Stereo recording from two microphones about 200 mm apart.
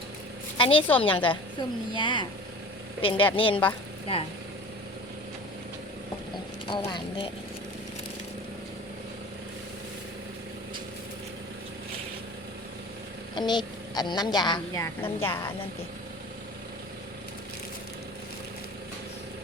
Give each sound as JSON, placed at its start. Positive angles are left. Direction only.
{"t": 0.5, "sound": "a woman's voice", "side_deg": 25}
{"t": 6.7, "sound": "a woman's voice", "side_deg": 25}
{"t": 13.3, "sound": "a woman's voice", "side_deg": 20}
{"t": 15.0, "sound": "a woman's voice", "side_deg": 10}